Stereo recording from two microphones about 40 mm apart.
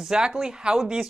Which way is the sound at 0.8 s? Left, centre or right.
Centre.